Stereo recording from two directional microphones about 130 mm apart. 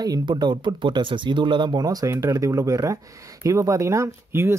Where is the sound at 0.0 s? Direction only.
30° right (ahead or behind).